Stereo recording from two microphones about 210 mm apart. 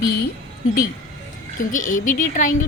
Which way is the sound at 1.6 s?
40° left (ahead or behind).